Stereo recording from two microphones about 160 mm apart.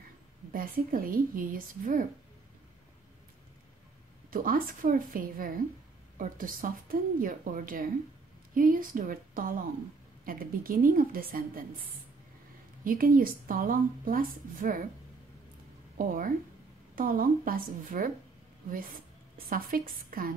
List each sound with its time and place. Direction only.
0.5 s a woman's voice: 60° right (ahead or behind)
4.3 s a woman's voice: 60° right (ahead or behind)
12.8 s a woman's voice: 60° right (ahead or behind)
16.9 s a woman's voice: 60° right (ahead or behind)
19.3 s a woman's voice: 65° right (ahead or behind)